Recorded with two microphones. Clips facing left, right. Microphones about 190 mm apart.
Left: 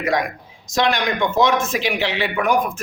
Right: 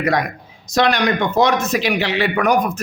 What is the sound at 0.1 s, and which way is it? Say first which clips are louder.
Speech: right 1 dB; 40° right (ahead or behind).